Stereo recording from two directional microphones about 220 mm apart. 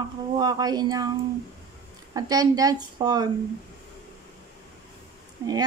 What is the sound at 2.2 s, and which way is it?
Speech, 15° right (ahead or behind).